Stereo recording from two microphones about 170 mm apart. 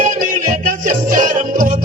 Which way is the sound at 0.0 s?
50° right (ahead or behind).